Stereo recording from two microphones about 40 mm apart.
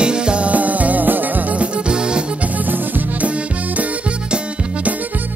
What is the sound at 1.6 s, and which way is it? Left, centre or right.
Music, right.